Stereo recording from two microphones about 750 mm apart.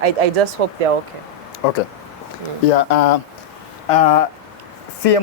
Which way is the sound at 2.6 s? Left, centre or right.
Left.